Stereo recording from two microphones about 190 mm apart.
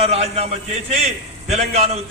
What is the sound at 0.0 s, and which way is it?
A man's voice, 35° right (ahead or behind).